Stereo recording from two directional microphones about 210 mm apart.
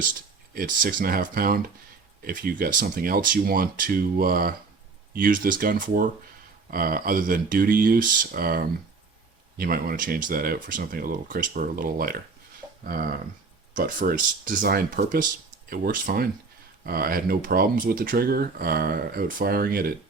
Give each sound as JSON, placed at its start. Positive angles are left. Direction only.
{"t": 0.5, "sound": "speech", "side_deg": -40}